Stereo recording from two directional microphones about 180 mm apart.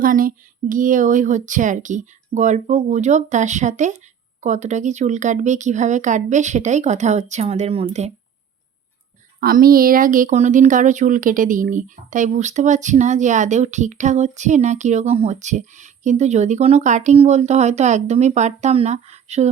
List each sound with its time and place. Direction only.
0.0 s speech: 50° right (ahead or behind); by 8.1 s 35° right (ahead or behind)
9.4 s speech: 55° right (ahead or behind); by 19.5 s 40° right (ahead or behind)